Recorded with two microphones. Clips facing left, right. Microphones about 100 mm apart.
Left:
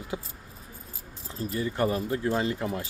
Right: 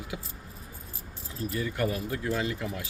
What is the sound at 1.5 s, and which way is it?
Speech, 30° left (ahead or behind).